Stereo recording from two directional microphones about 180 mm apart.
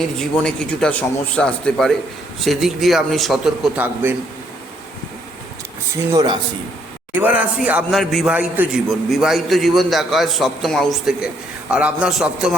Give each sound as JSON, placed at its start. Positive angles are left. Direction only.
{"t": 0.2, "sound": "speech", "side_deg": 5}
{"t": 6.1, "sound": "speech", "side_deg": -20}
{"t": 7.1, "sound": "speech", "side_deg": -10}